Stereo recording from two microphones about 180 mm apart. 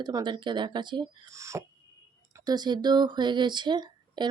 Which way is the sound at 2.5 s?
25° right (ahead or behind).